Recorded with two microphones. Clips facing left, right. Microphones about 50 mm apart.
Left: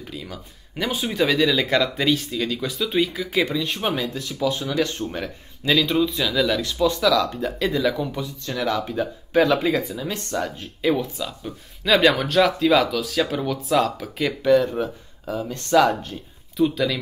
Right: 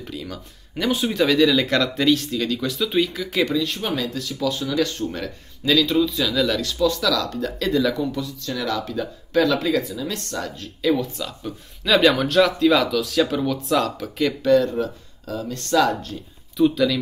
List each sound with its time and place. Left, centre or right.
0.0 s speech: centre
3.8 s speech: left
6.2 s speech: centre
8.0 s speech: centre
11.1 s speech: centre; by 16.2 s left
16.5 s speech: centre